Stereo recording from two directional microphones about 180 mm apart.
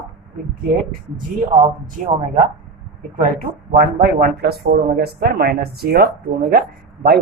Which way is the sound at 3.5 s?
55° right (ahead or behind).